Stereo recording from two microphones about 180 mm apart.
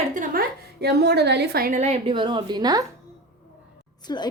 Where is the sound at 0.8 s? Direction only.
65° right (ahead or behind).